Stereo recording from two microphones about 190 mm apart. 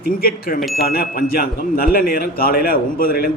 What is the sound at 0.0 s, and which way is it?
Speech, 50° left (ahead or behind).